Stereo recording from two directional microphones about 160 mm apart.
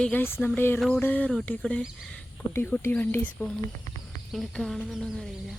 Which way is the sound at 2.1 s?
15° left (ahead or behind).